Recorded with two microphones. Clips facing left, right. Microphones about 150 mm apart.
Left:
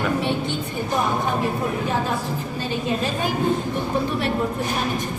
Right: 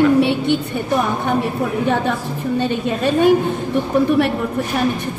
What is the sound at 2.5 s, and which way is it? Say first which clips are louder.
Speech: right 6 dB; 65° right (ahead or behind).